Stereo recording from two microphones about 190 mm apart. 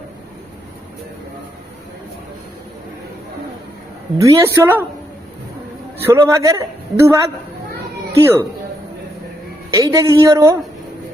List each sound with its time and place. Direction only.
4.2 s a woman's voice: 15° right (ahead or behind)
6.0 s a woman's voice: 15° right (ahead or behind)
9.7 s a woman's voice: 20° right (ahead or behind)